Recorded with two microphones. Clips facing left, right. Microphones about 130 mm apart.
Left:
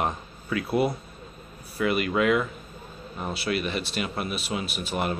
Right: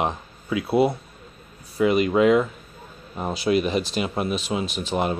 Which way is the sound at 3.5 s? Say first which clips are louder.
Right 8 dB; 35° right (ahead or behind).